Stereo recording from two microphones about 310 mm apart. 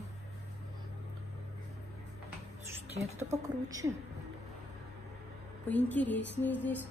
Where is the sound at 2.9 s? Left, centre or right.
Right.